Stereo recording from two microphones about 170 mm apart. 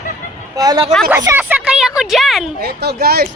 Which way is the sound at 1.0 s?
15° right (ahead or behind).